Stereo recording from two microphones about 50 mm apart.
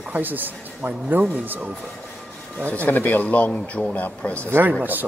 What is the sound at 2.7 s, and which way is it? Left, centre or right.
Speech, left.